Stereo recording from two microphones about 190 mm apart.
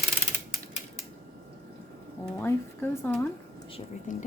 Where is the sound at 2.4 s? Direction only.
10° left (ahead or behind).